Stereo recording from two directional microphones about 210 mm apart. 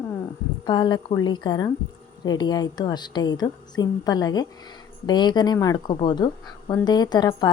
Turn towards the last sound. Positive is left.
turn(degrees=20)  # may be behind; listen again after turning